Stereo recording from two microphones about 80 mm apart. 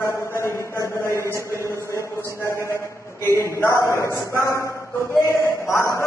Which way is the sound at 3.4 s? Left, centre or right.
Left.